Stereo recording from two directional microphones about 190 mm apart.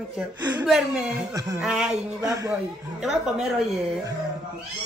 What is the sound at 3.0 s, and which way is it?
Speech, centre (ahead or behind).